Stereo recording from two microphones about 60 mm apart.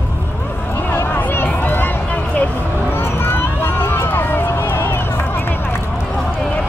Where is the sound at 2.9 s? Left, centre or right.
Left.